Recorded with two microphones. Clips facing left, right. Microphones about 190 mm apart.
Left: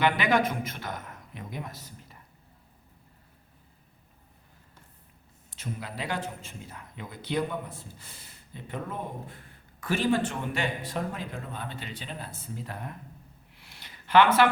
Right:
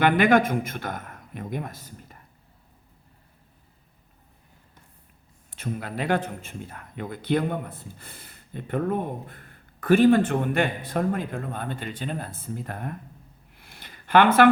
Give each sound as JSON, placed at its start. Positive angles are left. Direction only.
{"t": 0.0, "sound": "a man's voice", "side_deg": -50}
{"t": 5.5, "sound": "a man's voice", "side_deg": -55}
{"t": 13.6, "sound": "a sound", "side_deg": -50}